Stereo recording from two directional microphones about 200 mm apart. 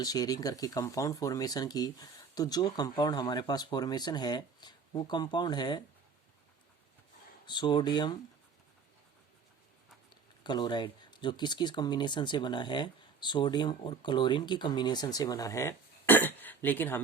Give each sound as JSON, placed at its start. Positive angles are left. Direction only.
{"t": 0.0, "sound": "speech", "side_deg": 20}
{"t": 7.4, "sound": "speech", "side_deg": 20}
{"t": 10.4, "sound": "speech", "side_deg": 20}